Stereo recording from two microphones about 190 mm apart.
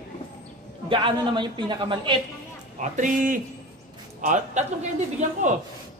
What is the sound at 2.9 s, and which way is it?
A man's voice, 45° right (ahead or behind).